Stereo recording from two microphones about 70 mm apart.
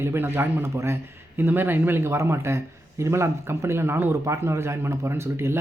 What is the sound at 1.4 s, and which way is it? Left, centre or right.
Speech, right.